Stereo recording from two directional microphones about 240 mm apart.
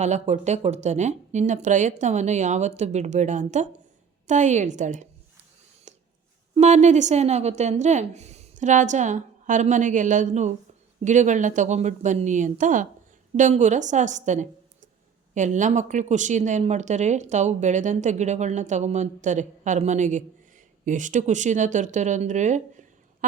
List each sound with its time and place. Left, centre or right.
0.0 s a woman's voice: right
5.9 s a sound: right
6.5 s a woman's voice: right